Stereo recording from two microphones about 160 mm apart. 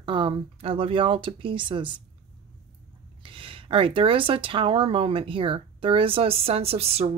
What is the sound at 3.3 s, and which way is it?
Speech, 35° right (ahead or behind).